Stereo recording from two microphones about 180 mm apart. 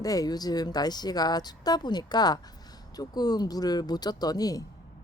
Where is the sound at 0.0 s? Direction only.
20° left (ahead or behind).